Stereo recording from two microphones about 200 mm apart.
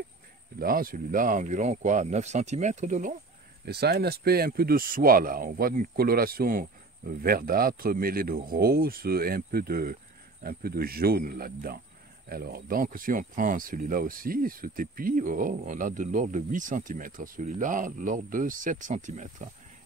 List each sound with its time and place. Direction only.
0.6 s speech: 45° right (ahead or behind)
3.6 s speech: 50° right (ahead or behind)